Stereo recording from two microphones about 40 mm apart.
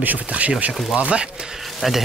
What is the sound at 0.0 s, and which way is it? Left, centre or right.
Speech, right.